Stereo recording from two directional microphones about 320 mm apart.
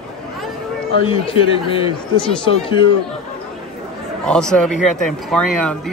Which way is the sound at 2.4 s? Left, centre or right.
Centre.